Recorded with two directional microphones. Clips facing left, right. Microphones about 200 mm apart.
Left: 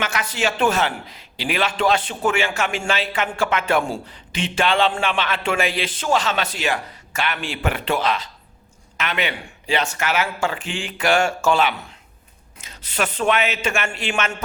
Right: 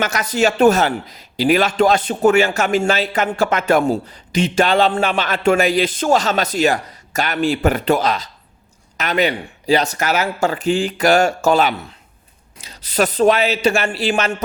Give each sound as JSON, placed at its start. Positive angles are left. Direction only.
{"t": 0.0, "sound": "a man's voice", "side_deg": -40}